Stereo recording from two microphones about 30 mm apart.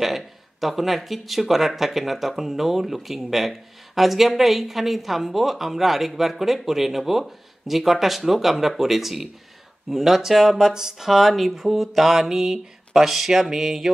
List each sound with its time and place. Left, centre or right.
0.0 s speech: centre
11.1 s speech: centre